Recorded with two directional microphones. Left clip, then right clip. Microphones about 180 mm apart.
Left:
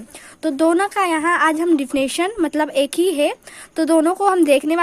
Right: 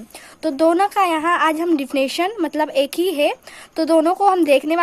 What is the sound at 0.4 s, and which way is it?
A woman's voice, 20° left (ahead or behind).